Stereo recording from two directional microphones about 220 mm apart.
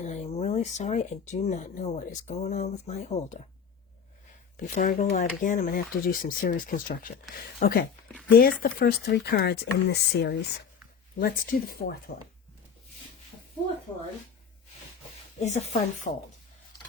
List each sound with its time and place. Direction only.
0.0 s speech: 30° left (ahead or behind)
4.5 s speech: 35° left (ahead or behind)
15.4 s speech: 30° left (ahead or behind)